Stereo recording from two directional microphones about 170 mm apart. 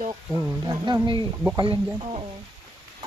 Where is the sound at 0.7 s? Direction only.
25° right (ahead or behind).